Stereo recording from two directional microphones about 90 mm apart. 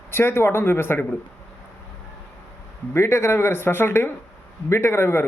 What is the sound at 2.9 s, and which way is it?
Speech, 30° left (ahead or behind).